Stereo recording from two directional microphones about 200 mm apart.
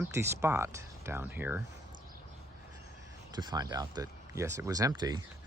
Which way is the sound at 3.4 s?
20° right (ahead or behind).